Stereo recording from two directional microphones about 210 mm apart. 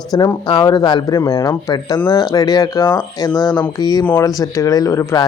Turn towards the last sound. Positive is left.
turn(degrees=15)  # may be behind; listen again after turning